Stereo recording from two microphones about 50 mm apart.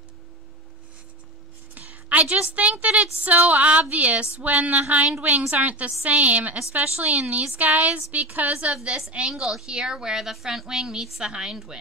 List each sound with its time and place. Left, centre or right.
1.8 s a woman's voice: right
9.3 s a woman's voice: centre